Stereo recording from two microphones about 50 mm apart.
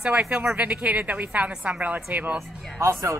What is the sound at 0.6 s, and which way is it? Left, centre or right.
A woman's voice, right.